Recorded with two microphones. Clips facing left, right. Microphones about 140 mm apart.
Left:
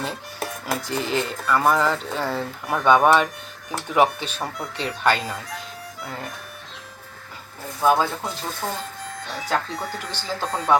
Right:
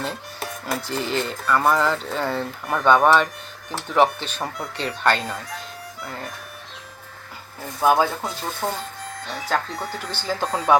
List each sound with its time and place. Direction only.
0.0 s speech: centre (ahead or behind)
7.8 s speech: 10° right (ahead or behind)